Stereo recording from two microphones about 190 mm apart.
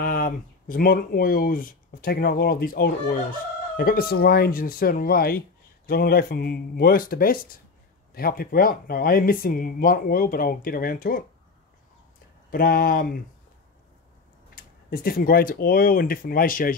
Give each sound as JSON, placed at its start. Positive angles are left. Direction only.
{"t": 0.0, "sound": "speech", "side_deg": 50}
{"t": 12.4, "sound": "speech", "side_deg": 50}
{"t": 14.5, "sound": "speech", "side_deg": 50}